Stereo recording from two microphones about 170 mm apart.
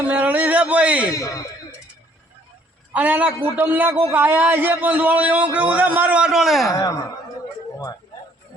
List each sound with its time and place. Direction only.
0.1 s speech: 10° right (ahead or behind)
1.1 s a man's voice: 20° left (ahead or behind)
2.9 s a man's voice: 10° right (ahead or behind)
3.3 s a man's voice: 20° left (ahead or behind)
3.6 s a man's voice: 10° right (ahead or behind)
6.7 s a man's voice: 20° left (ahead or behind)